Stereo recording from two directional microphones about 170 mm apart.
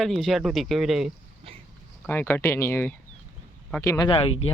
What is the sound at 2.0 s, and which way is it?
Speech, 10° left (ahead or behind).